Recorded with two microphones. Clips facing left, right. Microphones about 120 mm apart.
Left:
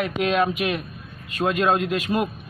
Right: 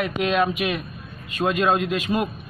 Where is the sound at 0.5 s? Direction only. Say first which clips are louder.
Even; 35° left (ahead or behind).